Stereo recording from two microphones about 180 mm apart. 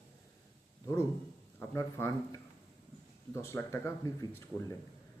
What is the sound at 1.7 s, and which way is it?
A man's voice, 15° left (ahead or behind).